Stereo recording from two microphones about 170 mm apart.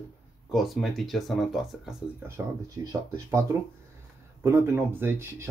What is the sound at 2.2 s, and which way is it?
Speech, 10° right (ahead or behind).